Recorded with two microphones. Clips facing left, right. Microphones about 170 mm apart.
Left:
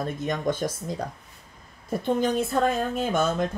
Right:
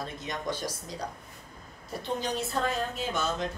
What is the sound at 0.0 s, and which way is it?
Speech, 50° left (ahead or behind).